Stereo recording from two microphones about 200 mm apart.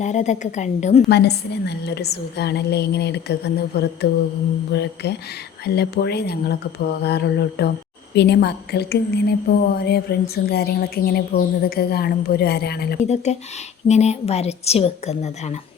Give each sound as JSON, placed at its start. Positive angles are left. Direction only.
{"t": 0.0, "sound": "a woman's voice", "side_deg": 35}
{"t": 1.1, "sound": "a woman's voice", "side_deg": 55}
{"t": 13.0, "sound": "a woman's voice", "side_deg": 35}